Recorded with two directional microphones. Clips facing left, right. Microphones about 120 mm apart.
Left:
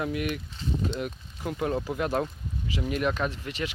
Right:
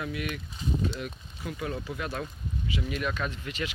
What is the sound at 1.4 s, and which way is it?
Speech, 45° left (ahead or behind).